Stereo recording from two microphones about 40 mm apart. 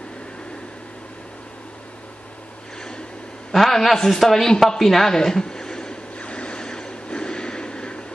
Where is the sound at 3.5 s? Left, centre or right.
Centre.